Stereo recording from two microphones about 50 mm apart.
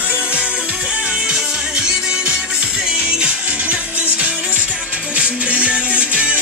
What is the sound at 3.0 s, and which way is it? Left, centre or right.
Music, right.